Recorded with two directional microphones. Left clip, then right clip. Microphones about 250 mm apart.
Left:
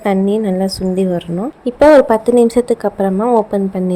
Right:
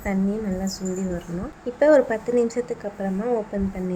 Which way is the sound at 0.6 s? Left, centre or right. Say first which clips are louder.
Left 13 dB; left.